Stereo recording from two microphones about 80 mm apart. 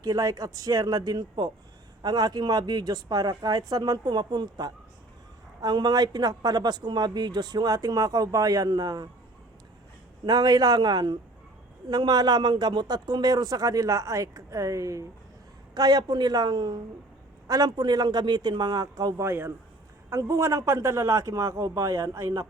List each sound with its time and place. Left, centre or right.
0.0 s a man's voice: right
10.2 s a man's voice: right
15.7 s a man's voice: right
19.2 s a man's voice: right